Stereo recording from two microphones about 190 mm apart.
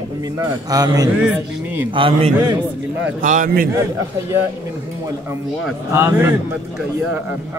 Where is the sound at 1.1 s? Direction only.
10° right (ahead or behind).